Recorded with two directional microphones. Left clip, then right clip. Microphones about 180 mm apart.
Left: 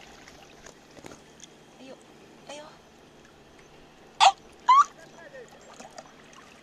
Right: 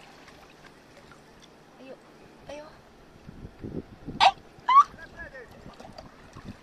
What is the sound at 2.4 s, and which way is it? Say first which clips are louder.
Vehicle: right 1 dB; 30° right (ahead or behind).